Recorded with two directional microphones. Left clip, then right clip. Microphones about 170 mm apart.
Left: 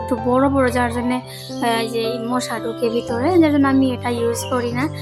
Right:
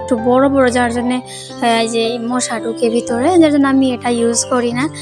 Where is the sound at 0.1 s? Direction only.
20° right (ahead or behind).